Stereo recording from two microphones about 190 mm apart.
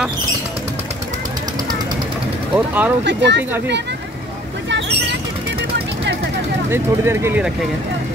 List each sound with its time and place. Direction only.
2.5 s speech: 10° right (ahead or behind)
3.1 s speech: 70° right (ahead or behind)
4.6 s a sound: 70° right (ahead or behind)
6.7 s speech: 15° right (ahead or behind)